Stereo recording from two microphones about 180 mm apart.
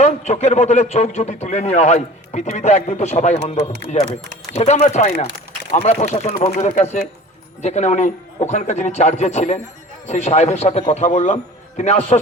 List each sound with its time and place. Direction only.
0.0 s a man's voice: 40° left (ahead or behind)